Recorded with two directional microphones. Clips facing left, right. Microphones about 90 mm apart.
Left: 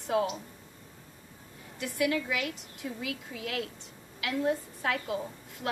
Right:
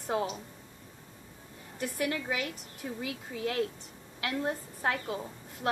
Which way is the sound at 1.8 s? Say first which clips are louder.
Left 3 dB; 40° right (ahead or behind).